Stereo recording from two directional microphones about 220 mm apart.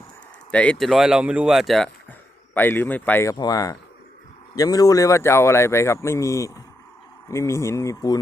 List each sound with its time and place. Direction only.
0.5 s speech: 5° left (ahead or behind)